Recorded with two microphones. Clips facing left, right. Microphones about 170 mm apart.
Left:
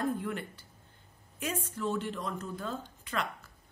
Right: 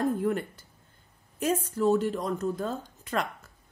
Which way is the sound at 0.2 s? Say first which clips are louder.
Right 9 dB; 45° right (ahead or behind).